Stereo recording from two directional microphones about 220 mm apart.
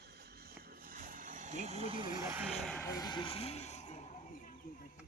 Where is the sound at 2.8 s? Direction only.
15° left (ahead or behind); by 4.5 s 35° left (ahead or behind).